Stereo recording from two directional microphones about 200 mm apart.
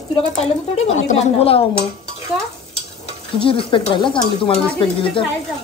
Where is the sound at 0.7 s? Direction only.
30° left (ahead or behind).